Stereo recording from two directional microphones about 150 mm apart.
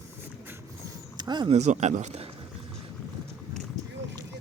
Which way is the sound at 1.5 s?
50° right (ahead or behind).